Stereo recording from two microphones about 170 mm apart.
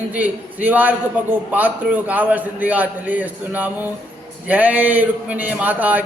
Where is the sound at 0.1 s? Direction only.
10° right (ahead or behind).